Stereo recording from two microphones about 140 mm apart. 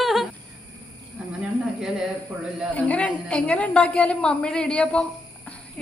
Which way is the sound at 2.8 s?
10° left (ahead or behind).